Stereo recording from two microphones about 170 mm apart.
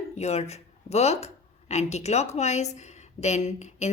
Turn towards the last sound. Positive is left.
turn(degrees=40)  # may be behind; listen again after turning